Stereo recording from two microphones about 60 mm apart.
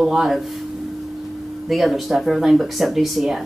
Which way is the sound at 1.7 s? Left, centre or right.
Centre.